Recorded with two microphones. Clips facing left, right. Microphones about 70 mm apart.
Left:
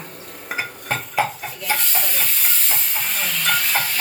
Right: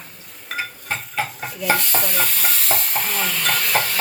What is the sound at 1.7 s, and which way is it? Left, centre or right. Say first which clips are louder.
Stir: right 4 dB; right.